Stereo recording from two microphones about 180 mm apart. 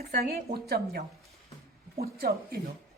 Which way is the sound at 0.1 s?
55° right (ahead or behind).